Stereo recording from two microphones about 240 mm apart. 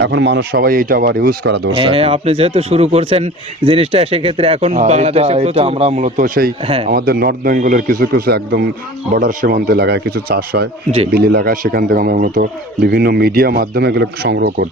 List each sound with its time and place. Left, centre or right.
0.0 s speech: right
1.7 s speech: right